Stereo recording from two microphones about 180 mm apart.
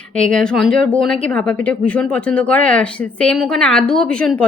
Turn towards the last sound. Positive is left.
turn(degrees=5)  # may be behind; listen again after turning